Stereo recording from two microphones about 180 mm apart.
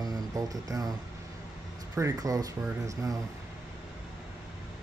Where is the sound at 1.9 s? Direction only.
20° right (ahead or behind).